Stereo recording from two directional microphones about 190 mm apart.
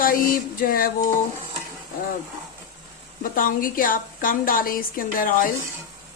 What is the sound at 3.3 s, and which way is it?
A woman's voice, 45° left (ahead or behind).